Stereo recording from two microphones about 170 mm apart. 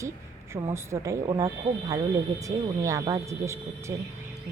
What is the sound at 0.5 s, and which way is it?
A woman's voice, 15° right (ahead or behind).